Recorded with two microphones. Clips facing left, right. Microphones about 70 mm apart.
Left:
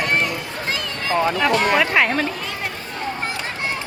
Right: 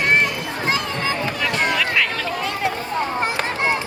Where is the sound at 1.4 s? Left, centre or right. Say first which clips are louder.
Left 2 dB; left.